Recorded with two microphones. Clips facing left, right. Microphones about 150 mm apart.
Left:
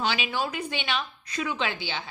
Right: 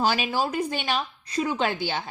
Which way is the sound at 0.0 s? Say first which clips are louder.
Right 4 dB; 40° right (ahead or behind).